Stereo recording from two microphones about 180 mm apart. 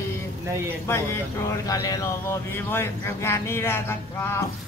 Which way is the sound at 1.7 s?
20° left (ahead or behind).